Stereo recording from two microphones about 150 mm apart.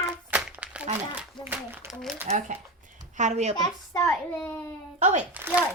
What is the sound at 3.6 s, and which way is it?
A child's voice, 25° left (ahead or behind).